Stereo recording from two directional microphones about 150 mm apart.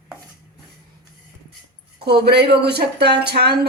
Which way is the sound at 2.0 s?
90° right.